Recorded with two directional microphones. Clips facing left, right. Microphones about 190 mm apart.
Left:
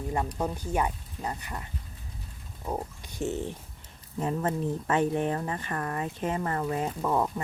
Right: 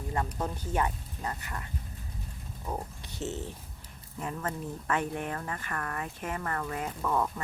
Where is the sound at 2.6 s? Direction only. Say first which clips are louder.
Left 4 dB; 15° left (ahead or behind).